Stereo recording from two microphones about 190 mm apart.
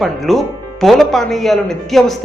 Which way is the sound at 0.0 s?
Centre (ahead or behind).